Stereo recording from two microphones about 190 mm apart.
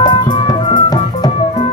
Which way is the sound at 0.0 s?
25° left (ahead or behind).